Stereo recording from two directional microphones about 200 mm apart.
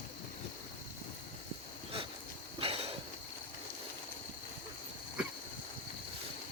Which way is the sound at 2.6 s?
30° right (ahead or behind).